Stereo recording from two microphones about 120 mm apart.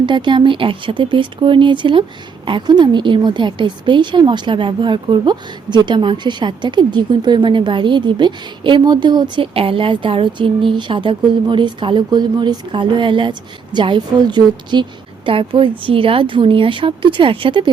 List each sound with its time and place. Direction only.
0.0 s a woman's voice: 40° right (ahead or behind)